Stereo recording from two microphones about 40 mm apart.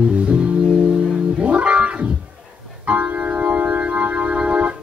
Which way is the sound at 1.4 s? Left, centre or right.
Right.